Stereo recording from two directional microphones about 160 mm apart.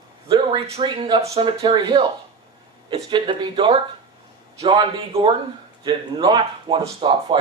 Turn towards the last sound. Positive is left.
turn(degrees=-30)  # may be behind; listen again after turning